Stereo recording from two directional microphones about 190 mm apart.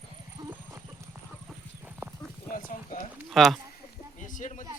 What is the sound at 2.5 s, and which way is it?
Speech, 45° left (ahead or behind).